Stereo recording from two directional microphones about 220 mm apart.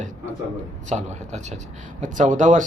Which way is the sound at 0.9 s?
30° right (ahead or behind).